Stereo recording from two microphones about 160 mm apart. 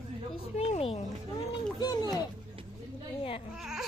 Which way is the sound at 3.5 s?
5° right (ahead or behind).